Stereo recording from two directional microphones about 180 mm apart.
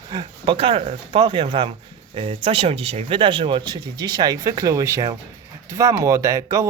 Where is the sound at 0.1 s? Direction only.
25° right (ahead or behind).